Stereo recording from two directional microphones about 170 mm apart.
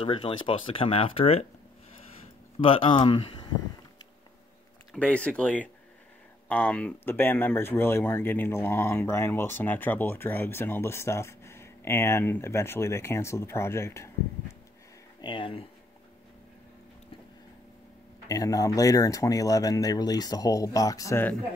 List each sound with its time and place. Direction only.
0.0 s speech: 30° left (ahead or behind)
2.6 s speech: 30° left (ahead or behind)
4.9 s speech: 5° left (ahead or behind)
15.2 s speech: 30° left (ahead or behind)
18.3 s speech: 20° left (ahead or behind)